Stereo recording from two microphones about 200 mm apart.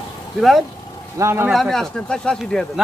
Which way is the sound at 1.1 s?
15° right (ahead or behind).